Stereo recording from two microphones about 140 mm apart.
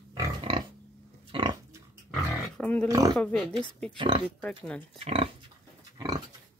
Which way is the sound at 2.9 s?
25° right (ahead or behind).